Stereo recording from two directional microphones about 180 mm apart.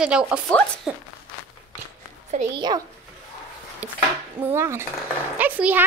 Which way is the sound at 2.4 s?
45° right (ahead or behind).